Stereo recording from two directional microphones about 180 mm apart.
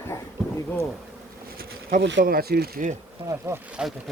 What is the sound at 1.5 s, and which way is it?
Bee, 55° right (ahead or behind).